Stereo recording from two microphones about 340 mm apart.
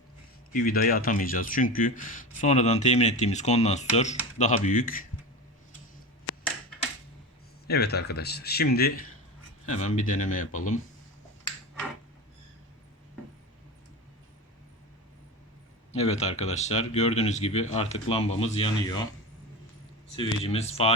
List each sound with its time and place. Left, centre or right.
0.5 s speech: left
6.3 s a sound: left
7.7 s speech: left
15.9 s speech: centre
20.4 s speech: centre